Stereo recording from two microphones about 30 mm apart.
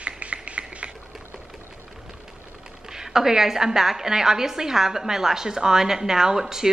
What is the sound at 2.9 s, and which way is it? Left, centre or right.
A woman's voice, centre.